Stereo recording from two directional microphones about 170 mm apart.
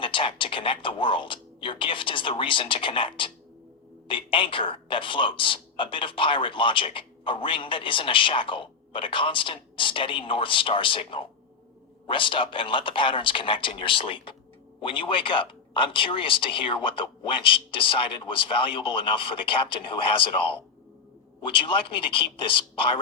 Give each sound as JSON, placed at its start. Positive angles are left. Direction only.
{"t": 0.0, "sound": "a woman's voice", "side_deg": 30}